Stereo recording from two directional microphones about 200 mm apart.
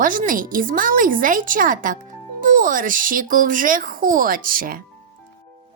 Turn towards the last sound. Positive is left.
turn(degrees=-45)  # may be behind; listen again after turning